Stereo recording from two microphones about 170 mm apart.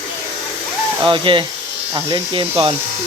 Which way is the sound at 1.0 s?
30° right (ahead or behind).